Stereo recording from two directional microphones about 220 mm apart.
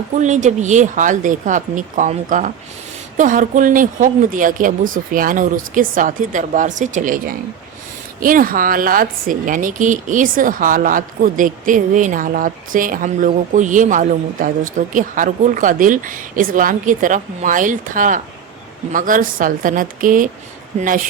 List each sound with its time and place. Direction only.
0.2 s a woman's voice: 35° right (ahead or behind)